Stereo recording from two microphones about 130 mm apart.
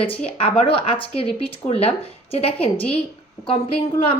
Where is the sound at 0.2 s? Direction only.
45° left (ahead or behind).